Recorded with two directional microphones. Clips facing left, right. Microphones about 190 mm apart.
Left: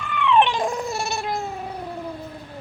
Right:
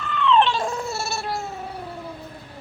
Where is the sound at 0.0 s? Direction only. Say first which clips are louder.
Even; 15° left (ahead or behind).